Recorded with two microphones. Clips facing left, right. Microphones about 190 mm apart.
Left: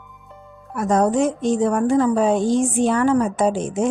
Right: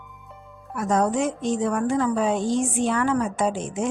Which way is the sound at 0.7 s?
40° left (ahead or behind).